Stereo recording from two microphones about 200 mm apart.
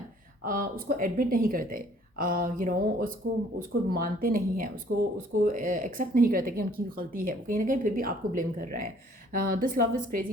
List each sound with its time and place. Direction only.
0.4 s speech: 45° right (ahead or behind)
4.9 s speech: 60° right (ahead or behind)
5.4 s speech: 45° right (ahead or behind)